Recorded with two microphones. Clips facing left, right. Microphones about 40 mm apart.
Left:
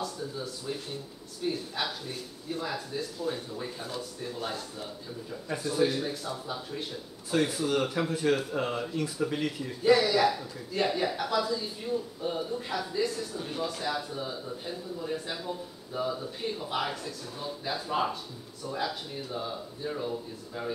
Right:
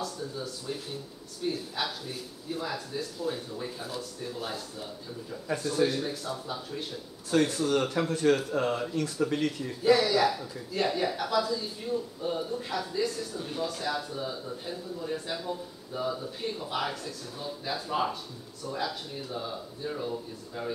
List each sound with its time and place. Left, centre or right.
0.0 s speech: centre